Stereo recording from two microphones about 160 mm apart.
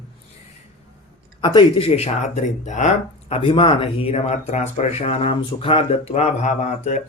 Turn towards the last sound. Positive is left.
turn(degrees=50)  # may be behind; listen again after turning